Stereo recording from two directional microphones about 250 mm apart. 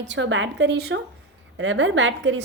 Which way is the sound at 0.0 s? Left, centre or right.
Right.